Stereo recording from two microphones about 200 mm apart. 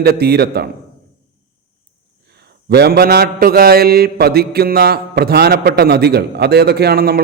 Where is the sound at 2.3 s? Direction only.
55° right (ahead or behind).